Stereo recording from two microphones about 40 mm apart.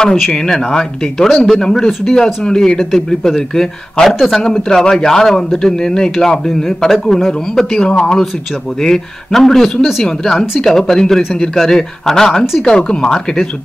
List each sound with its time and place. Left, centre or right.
0.0 s speech: centre
7.9 s speech: left
8.8 s speech: centre